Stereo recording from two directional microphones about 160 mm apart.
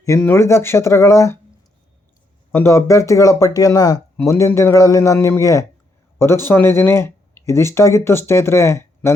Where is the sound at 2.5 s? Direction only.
15° left (ahead or behind).